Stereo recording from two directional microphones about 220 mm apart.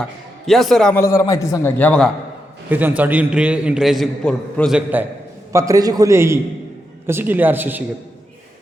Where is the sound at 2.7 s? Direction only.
10° right (ahead or behind).